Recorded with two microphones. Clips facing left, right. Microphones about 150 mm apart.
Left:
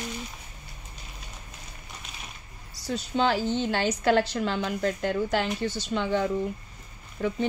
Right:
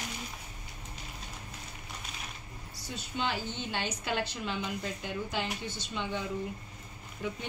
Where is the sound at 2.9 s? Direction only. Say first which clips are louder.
Left 9 dB; 90° left.